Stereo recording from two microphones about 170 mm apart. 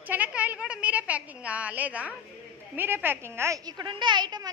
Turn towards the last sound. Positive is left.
turn(degrees=-25)  # may be behind; listen again after turning